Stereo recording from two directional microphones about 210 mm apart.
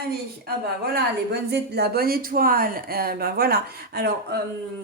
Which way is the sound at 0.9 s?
50° right (ahead or behind).